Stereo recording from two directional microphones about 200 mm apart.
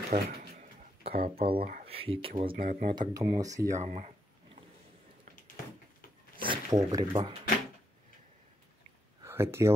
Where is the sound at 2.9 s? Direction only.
25° right (ahead or behind).